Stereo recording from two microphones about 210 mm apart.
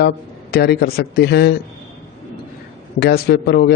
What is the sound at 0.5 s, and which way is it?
A man's voice, 50° left (ahead or behind).